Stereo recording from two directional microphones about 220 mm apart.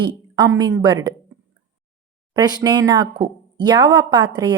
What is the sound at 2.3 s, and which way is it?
A woman's voice, 20° right (ahead or behind).